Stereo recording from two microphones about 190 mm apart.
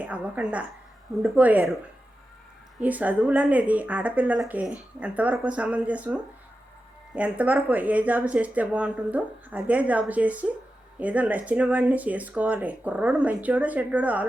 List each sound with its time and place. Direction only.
0.0 s a woman's voice: 5° right (ahead or behind)
2.8 s a woman's voice: 10° right (ahead or behind)